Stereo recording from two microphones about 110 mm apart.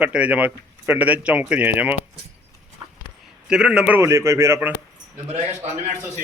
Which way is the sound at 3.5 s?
5° right (ahead or behind).